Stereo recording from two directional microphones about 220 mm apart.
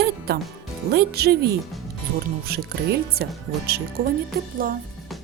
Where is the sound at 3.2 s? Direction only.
45° right (ahead or behind).